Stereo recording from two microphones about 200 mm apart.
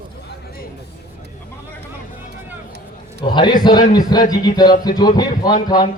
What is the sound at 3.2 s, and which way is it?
Speech, 25° left (ahead or behind).